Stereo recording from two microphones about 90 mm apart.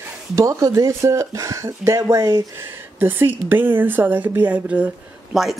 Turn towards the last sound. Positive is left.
turn(degrees=-5)  # may be behind; listen again after turning